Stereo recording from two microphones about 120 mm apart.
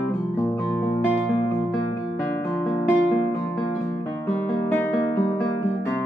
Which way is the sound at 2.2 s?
10° left (ahead or behind).